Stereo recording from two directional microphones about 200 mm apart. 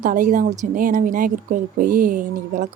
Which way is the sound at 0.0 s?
45° right (ahead or behind).